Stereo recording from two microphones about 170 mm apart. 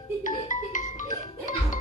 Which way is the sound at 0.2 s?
50° left (ahead or behind).